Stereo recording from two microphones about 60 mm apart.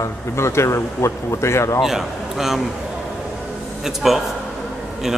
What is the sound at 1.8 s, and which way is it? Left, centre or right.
Speech, centre.